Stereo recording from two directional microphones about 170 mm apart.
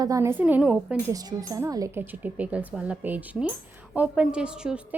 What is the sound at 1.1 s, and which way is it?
A woman's voice, 20° right (ahead or behind).